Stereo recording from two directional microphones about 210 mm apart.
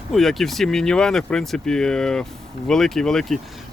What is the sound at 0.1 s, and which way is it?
Speech, centre (ahead or behind).